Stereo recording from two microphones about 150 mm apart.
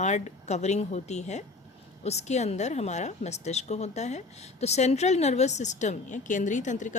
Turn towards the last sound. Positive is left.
turn(degrees=55)  # may be behind; listen again after turning